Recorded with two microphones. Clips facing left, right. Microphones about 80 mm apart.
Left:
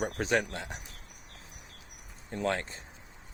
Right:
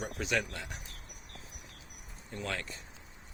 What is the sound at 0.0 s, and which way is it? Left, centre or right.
Speech, left.